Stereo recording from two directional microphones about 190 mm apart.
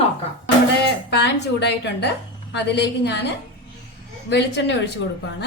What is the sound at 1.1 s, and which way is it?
A woman's voice, 60° left (ahead or behind).